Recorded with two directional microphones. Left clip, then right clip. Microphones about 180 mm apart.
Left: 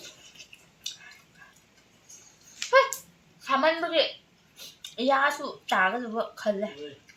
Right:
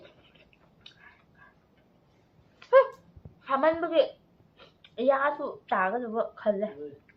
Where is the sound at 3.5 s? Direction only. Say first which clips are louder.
Left 1 dB; 10° left (ahead or behind).